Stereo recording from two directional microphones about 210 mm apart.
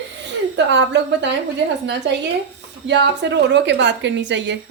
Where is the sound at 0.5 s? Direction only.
55° right (ahead or behind).